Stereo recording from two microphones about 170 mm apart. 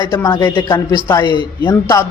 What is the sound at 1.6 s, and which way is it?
Speech, 25° left (ahead or behind).